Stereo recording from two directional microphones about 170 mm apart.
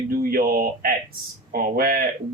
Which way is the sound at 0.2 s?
60° right (ahead or behind).